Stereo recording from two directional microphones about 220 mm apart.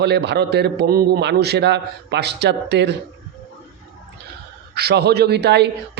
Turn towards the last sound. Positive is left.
turn(degrees=-50)  # may be behind; listen again after turning